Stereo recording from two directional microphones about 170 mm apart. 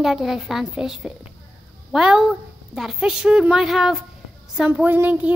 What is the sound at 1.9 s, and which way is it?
Child singing, 5° right (ahead or behind).